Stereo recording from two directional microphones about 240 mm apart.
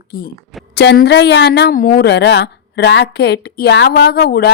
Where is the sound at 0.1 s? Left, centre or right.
Left.